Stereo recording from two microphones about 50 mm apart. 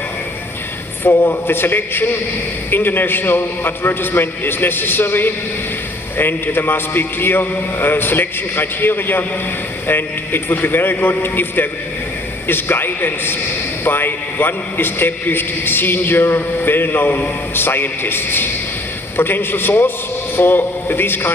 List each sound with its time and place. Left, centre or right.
1.0 s a man's voice: left